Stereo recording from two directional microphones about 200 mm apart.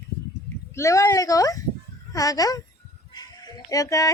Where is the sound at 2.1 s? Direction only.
15° left (ahead or behind).